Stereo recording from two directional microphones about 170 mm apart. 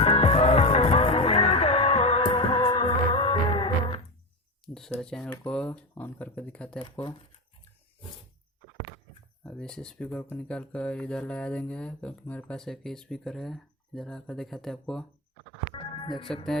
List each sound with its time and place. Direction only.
0.0 s music: 35° left (ahead or behind)
4.6 s speech: 5° left (ahead or behind)
9.4 s speech: 5° left (ahead or behind)
15.7 s music: 30° left (ahead or behind)